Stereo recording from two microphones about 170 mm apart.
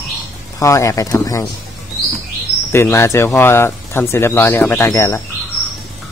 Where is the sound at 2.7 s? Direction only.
15° left (ahead or behind).